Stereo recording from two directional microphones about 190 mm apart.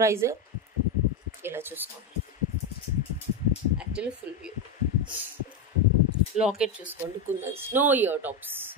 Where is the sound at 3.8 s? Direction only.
5° right (ahead or behind).